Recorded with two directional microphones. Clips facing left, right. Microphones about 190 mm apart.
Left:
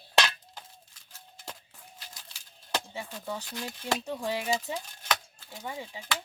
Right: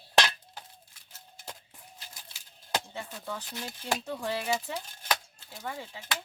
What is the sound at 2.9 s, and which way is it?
Speech, 10° left (ahead or behind).